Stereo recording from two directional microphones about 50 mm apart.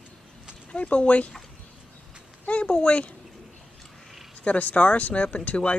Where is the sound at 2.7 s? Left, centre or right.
Left.